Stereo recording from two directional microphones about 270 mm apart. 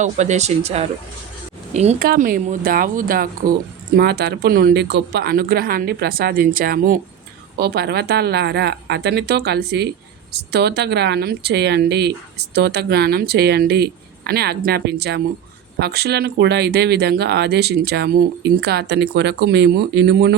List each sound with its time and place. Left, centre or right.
0.0 s speech: right